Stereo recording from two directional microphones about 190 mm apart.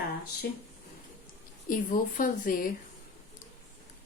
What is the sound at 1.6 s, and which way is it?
Speech, 45° left (ahead or behind).